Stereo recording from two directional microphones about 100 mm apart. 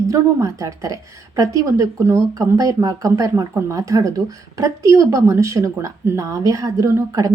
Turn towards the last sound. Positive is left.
turn(degrees=-35)  # may be behind; listen again after turning